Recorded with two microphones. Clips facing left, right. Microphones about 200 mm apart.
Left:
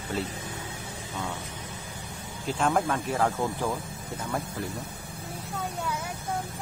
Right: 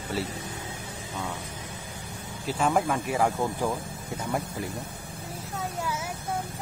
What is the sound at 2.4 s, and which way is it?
Speech, 5° right (ahead or behind).